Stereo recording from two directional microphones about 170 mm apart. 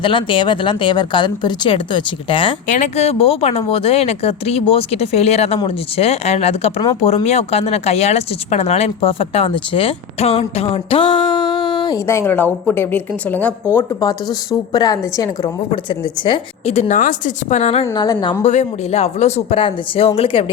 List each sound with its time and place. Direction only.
0.0 s a woman's voice: 30° left (ahead or behind)
2.6 s speech: 45° left (ahead or behind)
18.0 s a woman's voice: 25° left (ahead or behind)
18.4 s speech: 40° left (ahead or behind)